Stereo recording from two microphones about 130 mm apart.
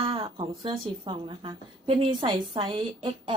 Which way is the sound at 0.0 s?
45° right (ahead or behind).